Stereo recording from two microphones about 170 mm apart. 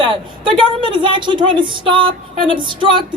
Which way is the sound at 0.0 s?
30° right (ahead or behind).